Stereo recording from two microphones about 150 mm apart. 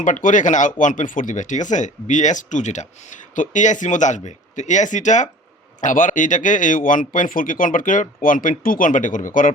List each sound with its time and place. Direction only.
0.0 s speech: 60° left (ahead or behind)